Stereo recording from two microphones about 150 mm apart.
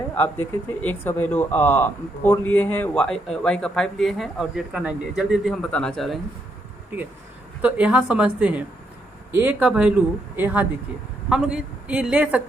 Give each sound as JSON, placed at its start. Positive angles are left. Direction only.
{"t": 0.1, "sound": "speech", "side_deg": 10}
{"t": 5.7, "sound": "speech", "side_deg": 5}
{"t": 7.6, "sound": "speech", "side_deg": -10}